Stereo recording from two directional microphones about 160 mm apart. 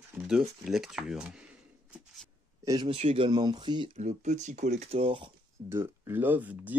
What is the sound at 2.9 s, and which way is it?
Speech, 40° right (ahead or behind).